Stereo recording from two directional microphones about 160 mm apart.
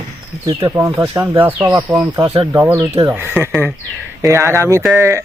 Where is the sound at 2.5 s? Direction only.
15° right (ahead or behind).